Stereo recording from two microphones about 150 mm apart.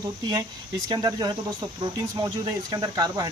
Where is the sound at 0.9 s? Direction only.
25° right (ahead or behind).